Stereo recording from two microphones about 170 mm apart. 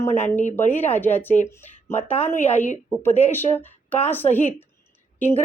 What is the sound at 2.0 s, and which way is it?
Speech, 40° left (ahead or behind).